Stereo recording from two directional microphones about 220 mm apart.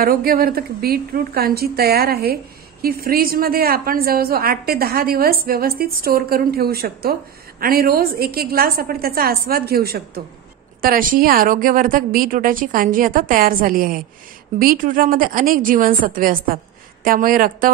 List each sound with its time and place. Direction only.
0.0 s a woman's voice: 45° right (ahead or behind)